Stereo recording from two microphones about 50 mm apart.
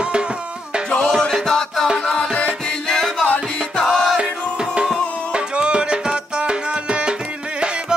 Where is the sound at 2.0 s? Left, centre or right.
Left.